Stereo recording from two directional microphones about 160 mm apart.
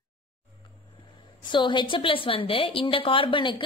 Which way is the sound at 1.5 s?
30° left (ahead or behind).